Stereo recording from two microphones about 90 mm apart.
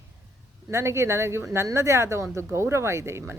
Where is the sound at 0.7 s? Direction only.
30° right (ahead or behind).